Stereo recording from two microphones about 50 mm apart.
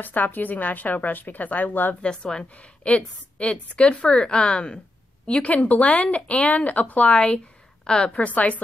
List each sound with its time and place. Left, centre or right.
0.0 s a woman's voice: left
2.0 s a woman's voice: centre
8.2 s speech: left